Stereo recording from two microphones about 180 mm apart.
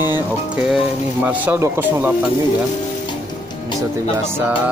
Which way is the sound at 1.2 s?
10° right (ahead or behind).